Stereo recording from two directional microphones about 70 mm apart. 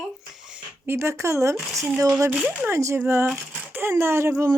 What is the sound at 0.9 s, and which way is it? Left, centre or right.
Speech, right.